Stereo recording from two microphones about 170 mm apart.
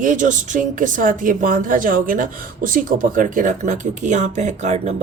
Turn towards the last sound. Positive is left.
turn(degrees=-40)  # may be behind; listen again after turning